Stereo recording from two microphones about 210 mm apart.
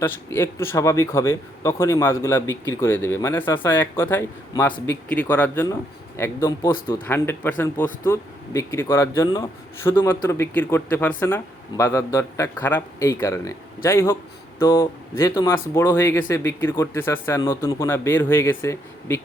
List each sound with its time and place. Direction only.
0.0 s speech: 10° left (ahead or behind)